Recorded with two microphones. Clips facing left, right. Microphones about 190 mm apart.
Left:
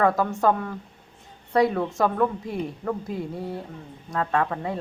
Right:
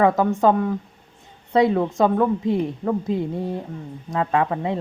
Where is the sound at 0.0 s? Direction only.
15° right (ahead or behind).